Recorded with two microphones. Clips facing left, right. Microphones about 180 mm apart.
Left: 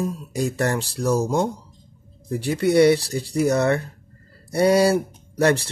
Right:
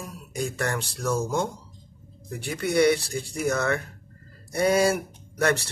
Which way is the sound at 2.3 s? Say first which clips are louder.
Left 8 dB; 35° left (ahead or behind).